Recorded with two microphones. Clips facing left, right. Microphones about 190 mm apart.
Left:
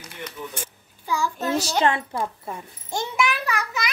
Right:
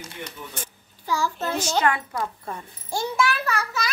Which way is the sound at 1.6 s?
30° left (ahead or behind).